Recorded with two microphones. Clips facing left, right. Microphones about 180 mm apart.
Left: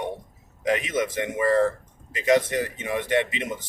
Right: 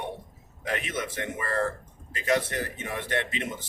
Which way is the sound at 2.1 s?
15° left (ahead or behind).